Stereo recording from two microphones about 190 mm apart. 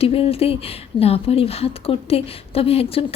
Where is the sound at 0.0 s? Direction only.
30° left (ahead or behind).